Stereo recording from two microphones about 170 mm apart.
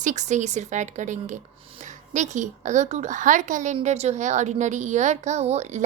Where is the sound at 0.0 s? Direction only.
45° right (ahead or behind).